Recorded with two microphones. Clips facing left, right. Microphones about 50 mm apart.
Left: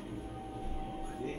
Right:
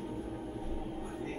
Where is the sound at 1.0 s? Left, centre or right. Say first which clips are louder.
Even; centre.